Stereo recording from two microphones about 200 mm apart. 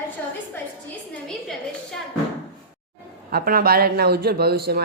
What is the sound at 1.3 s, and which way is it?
Speech, 5° left (ahead or behind).